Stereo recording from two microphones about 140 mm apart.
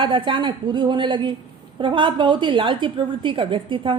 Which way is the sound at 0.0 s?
35° right (ahead or behind).